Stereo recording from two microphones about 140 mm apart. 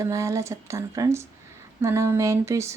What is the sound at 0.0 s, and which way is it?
Speech, 20° right (ahead or behind).